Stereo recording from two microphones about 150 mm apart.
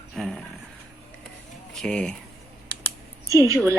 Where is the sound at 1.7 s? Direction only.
5° left (ahead or behind).